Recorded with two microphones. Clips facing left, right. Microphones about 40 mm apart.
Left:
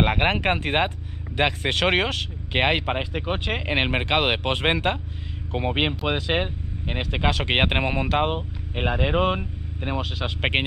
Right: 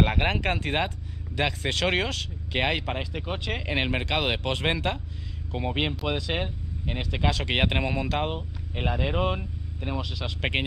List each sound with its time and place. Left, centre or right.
0.0 s speech: left